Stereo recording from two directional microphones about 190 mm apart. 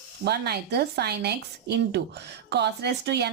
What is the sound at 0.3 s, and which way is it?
Speech, 60° right (ahead or behind).